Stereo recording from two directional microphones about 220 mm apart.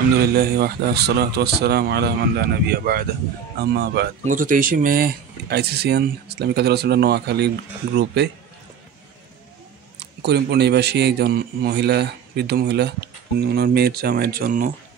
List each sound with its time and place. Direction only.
0.2 s speech: 45° right (ahead or behind)
4.2 s speech: 35° right (ahead or behind)
9.9 s speech: 50° right (ahead or behind)